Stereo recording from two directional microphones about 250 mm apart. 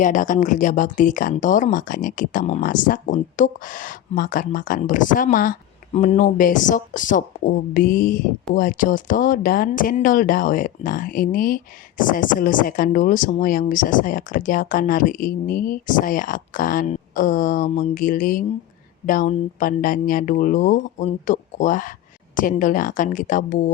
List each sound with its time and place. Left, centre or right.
0.0 s speech: left